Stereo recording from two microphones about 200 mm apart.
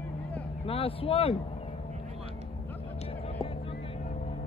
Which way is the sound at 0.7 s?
25° left (ahead or behind).